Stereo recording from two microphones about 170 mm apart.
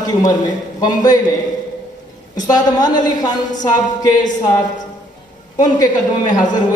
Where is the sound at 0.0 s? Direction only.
25° left (ahead or behind).